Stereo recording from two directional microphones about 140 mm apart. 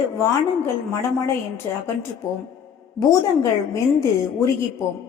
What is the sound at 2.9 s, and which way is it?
A woman's voice, 20° left (ahead or behind).